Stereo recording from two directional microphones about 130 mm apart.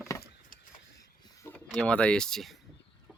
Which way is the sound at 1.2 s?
30° left (ahead or behind).